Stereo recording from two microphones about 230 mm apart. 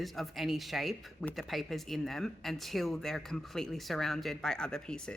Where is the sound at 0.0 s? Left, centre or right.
Centre.